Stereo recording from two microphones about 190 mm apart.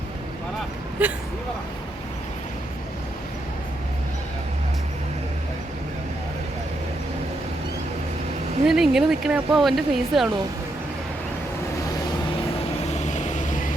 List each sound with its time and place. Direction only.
1.0 s speech: 10° right (ahead or behind)
8.6 s speech: centre (ahead or behind)
12.9 s vehicle: 40° left (ahead or behind)